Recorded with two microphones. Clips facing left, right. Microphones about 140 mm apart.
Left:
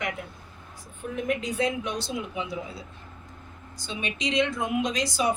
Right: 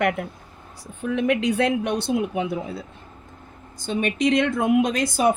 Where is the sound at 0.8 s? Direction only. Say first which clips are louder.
Right 8 dB; 80° right.